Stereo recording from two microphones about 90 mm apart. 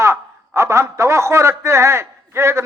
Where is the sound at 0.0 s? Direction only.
30° right (ahead or behind).